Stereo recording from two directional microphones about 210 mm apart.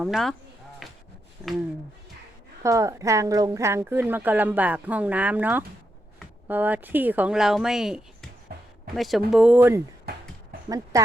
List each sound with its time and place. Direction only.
0.0 s speech: centre (ahead or behind)
0.8 s a sound: centre (ahead or behind)
2.6 s a woman's voice: 15° right (ahead or behind)
10.1 s music: 50° right (ahead or behind)
10.9 s a woman's voice: 15° right (ahead or behind)